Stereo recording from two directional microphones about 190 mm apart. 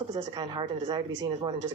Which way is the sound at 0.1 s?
25° right (ahead or behind).